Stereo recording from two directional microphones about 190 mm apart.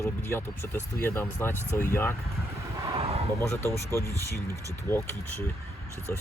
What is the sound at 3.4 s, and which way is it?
Speech, 15° left (ahead or behind).